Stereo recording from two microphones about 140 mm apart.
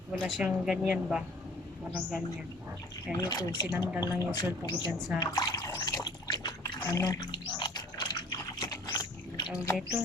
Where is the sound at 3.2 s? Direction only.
25° left (ahead or behind).